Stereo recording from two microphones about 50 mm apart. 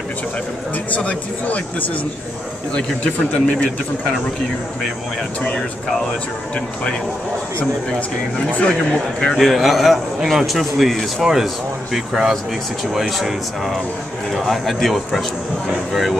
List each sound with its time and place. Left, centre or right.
0.9 s speech: left
3.0 s a man's voice: centre
8.9 s a man's voice: centre
9.4 s speech: centre